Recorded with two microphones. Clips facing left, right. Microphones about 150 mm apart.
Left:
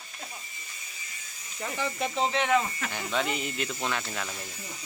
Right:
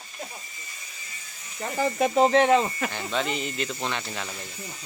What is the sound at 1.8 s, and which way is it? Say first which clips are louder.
Speech: right 8 dB; 45° right (ahead or behind).